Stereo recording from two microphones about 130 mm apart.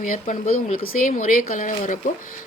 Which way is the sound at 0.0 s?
85° left.